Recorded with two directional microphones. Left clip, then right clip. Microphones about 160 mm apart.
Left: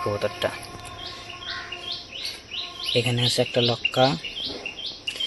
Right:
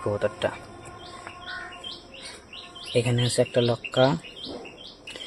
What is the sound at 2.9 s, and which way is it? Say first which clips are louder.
Speech: left 2 dB; centre (ahead or behind).